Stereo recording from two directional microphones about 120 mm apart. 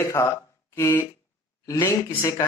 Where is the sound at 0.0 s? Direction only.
20° left (ahead or behind).